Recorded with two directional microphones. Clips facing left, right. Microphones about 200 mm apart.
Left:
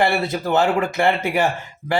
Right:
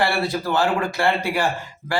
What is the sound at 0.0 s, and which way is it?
Speech, 20° left (ahead or behind).